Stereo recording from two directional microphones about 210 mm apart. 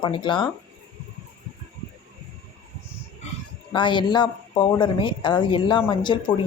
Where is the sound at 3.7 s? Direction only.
20° left (ahead or behind).